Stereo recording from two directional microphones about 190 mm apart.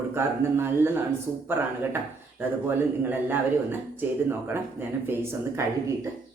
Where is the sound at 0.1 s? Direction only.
10° right (ahead or behind).